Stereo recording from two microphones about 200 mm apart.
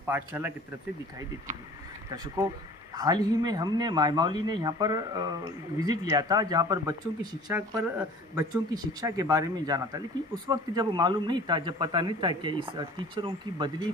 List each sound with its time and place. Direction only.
0.0 s speech: 10° right (ahead or behind)
2.0 s speech: 20° right (ahead or behind)